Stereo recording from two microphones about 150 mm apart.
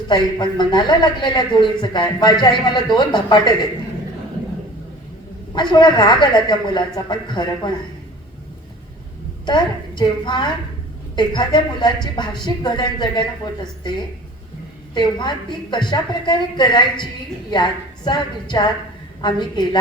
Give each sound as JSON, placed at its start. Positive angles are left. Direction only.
{"t": 0.1, "sound": "a man's voice", "side_deg": 30}
{"t": 5.5, "sound": "a man's voice", "side_deg": 30}
{"t": 9.5, "sound": "speech", "side_deg": 30}
{"t": 14.9, "sound": "a man's voice", "side_deg": 30}